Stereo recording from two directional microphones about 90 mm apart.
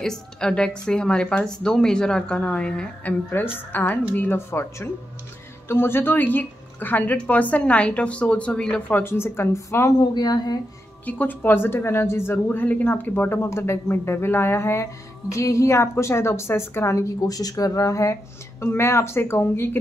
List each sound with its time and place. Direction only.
0.0 s a woman's voice: 5° left (ahead or behind)
8.9 s speech: 25° left (ahead or behind)
10.1 s speech: 50° left (ahead or behind)
11.1 s speech: 20° left (ahead or behind)
12.4 s speech: 15° left (ahead or behind); by 18.1 s 35° left (ahead or behind)
18.6 s speech: 25° left (ahead or behind)